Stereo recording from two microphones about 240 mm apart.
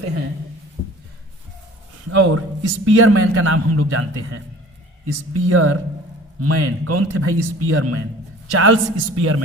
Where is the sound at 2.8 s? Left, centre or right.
Right.